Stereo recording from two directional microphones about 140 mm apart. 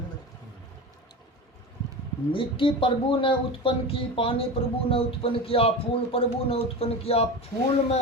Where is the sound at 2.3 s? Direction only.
40° left (ahead or behind).